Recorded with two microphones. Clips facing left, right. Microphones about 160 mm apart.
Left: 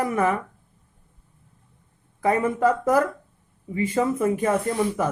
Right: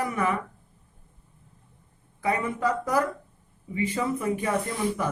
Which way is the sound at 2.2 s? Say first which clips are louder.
Left 6 dB; 50° left (ahead or behind).